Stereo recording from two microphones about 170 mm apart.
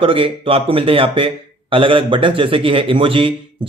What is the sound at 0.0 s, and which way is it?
A man's voice, 30° right (ahead or behind).